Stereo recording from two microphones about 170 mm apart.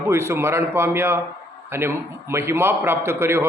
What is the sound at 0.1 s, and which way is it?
A man's voice, 15° right (ahead or behind).